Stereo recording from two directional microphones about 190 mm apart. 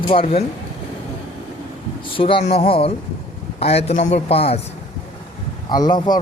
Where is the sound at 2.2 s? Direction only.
25° left (ahead or behind).